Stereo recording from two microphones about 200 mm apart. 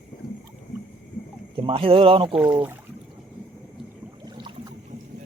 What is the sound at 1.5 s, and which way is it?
Speech, 25° right (ahead or behind).